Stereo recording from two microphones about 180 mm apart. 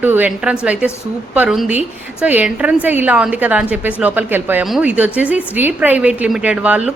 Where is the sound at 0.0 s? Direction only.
10° right (ahead or behind).